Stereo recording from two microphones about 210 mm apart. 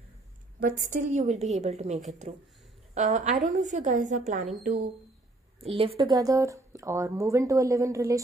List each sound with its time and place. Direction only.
0.6 s a woman's voice: 40° right (ahead or behind)
5.6 s speech: 25° right (ahead or behind)